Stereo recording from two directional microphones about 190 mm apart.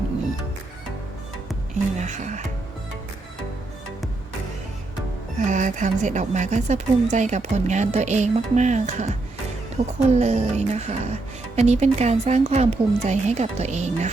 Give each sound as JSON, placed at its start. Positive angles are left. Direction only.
{"t": 1.7, "sound": "a woman's voice", "side_deg": -40}
{"t": 5.5, "sound": "a woman's voice", "side_deg": -40}